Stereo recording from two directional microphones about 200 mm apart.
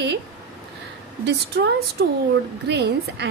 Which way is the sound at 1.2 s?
60° right (ahead or behind).